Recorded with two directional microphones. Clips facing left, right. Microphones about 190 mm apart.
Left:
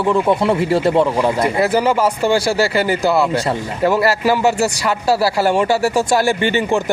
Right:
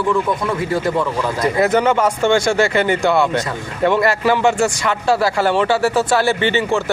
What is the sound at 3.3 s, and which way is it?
Speech, 30° left (ahead or behind).